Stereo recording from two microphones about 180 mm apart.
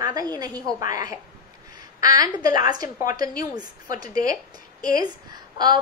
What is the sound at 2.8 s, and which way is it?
Speech, 45° left (ahead or behind).